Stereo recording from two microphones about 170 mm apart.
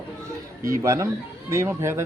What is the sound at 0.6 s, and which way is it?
Speech, 15° right (ahead or behind).